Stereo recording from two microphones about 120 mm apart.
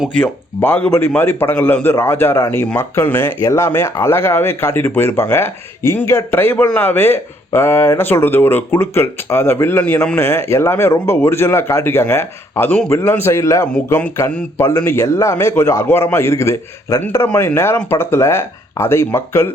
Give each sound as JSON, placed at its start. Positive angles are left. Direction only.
{"t": 0.2, "sound": "a man's voice", "side_deg": 15}